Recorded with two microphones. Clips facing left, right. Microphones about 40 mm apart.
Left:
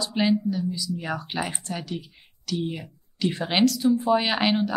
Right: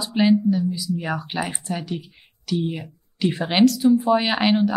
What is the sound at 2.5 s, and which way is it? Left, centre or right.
Speech, right.